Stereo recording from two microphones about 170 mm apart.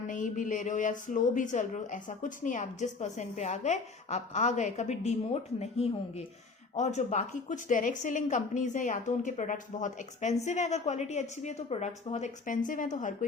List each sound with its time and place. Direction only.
0.1 s a woman's voice: 50° left (ahead or behind)